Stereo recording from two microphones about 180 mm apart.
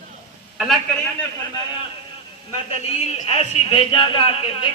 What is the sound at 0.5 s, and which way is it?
Speech, centre (ahead or behind).